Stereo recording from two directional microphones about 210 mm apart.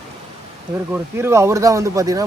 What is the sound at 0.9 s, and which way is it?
Speech, 10° right (ahead or behind).